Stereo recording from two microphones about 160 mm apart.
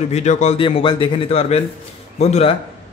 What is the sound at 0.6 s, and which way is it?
A man's voice, 30° left (ahead or behind).